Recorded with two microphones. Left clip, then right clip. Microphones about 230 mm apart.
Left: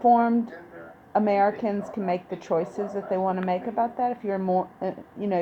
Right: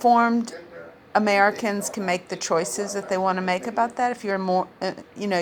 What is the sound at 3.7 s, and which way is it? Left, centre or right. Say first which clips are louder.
Speech: right 3 dB; centre.